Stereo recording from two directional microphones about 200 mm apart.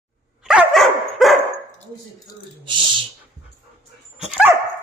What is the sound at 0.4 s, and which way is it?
Dog, centre (ahead or behind).